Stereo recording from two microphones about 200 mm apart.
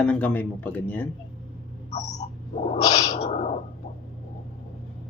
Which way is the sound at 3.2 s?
35° left (ahead or behind).